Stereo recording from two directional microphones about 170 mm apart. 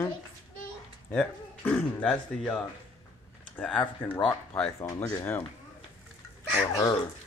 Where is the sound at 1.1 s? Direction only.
10° left (ahead or behind).